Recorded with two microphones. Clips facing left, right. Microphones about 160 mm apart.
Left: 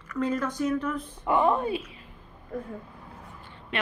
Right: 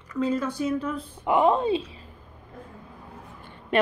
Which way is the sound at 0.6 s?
10° right (ahead or behind).